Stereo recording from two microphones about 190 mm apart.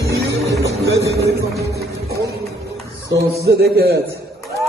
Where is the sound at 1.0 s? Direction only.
60° right (ahead or behind).